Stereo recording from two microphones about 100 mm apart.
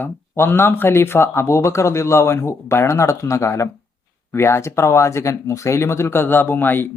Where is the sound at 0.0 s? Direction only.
25° left (ahead or behind).